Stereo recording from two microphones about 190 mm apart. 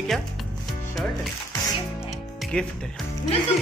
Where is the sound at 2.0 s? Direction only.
Centre (ahead or behind).